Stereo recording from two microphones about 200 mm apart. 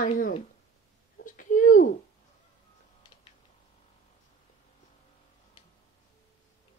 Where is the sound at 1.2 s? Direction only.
40° left (ahead or behind).